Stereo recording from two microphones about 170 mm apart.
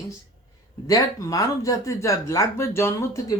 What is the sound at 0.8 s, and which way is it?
Speech, 20° left (ahead or behind).